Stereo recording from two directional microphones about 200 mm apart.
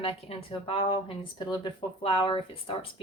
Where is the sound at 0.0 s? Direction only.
30° left (ahead or behind).